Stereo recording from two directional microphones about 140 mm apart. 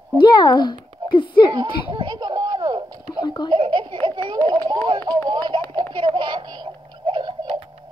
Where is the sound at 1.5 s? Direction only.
35° right (ahead or behind).